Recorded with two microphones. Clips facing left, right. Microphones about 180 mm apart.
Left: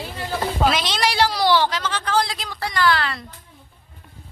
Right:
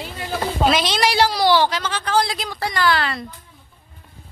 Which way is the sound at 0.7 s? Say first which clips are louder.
Right 3 dB; 5° right (ahead or behind).